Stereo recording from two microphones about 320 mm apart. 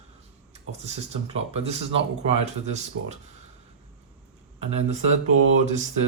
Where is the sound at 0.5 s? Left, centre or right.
Centre.